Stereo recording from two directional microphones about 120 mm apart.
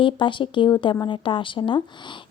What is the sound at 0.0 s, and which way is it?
Speech, 45° left (ahead or behind).